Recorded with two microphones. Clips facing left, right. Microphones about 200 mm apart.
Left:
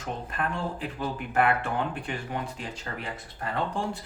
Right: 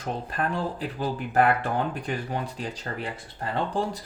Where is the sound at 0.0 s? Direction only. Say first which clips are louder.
Right 3 dB; 35° right (ahead or behind).